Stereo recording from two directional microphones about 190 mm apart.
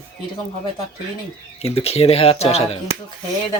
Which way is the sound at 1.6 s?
30° left (ahead or behind).